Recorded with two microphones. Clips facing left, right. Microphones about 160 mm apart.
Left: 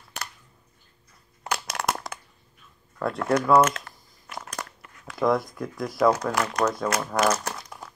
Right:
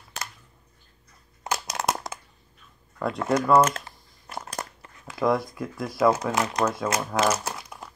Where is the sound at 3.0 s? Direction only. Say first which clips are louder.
Even; centre (ahead or behind).